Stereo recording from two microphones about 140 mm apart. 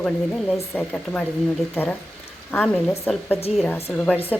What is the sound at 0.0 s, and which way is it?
A woman's voice, centre (ahead or behind).